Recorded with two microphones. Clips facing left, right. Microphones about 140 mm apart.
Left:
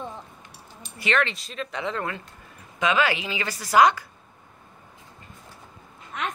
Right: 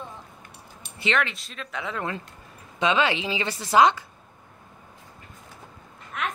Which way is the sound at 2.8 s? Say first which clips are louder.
Even; 25° right (ahead or behind).